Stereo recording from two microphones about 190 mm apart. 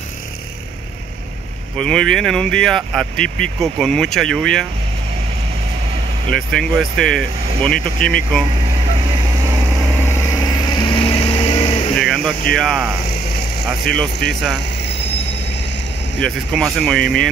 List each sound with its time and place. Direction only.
1.8 s speech: 5° left (ahead or behind)
6.8 s speech: centre (ahead or behind)
10.0 s vehicle: 20° left (ahead or behind)
12.0 s a sound: centre (ahead or behind)
12.5 s speech: centre (ahead or behind)
16.2 s speech: centre (ahead or behind)